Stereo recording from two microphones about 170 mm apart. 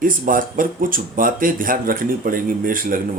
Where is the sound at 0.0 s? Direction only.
55° right (ahead or behind).